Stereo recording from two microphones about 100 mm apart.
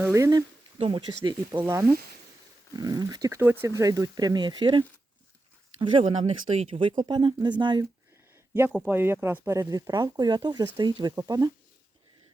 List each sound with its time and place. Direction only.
0.0 s speech: 30° right (ahead or behind)
0.8 s speech: 55° right (ahead or behind)
1.5 s speech: 25° right (ahead or behind)
2.7 s speech: 40° right (ahead or behind)
3.4 s speech: 20° right (ahead or behind)
3.8 s speech: 35° right (ahead or behind); by 7.9 s 50° right (ahead or behind)
8.9 s speech: 20° right (ahead or behind); by 11.5 s 40° right (ahead or behind)